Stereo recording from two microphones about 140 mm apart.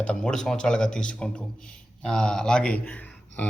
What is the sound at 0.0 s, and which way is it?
Speech, 5° left (ahead or behind).